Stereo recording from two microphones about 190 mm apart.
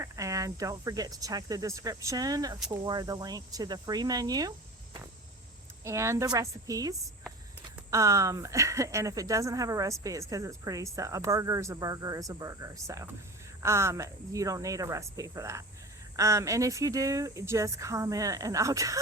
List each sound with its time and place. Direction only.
0.0 s speech: 15° right (ahead or behind)
5.8 s speech: 15° right (ahead or behind)